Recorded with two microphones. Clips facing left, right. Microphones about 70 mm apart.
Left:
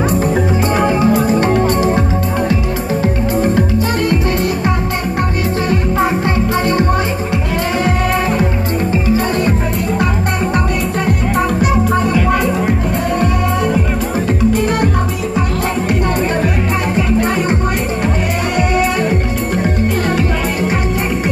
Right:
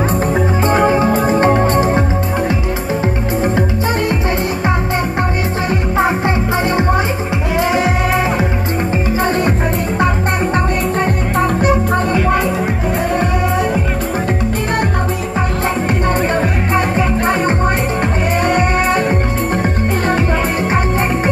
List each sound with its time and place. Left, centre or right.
0.3 s music: right
5.7 s music: right
11.3 s music: right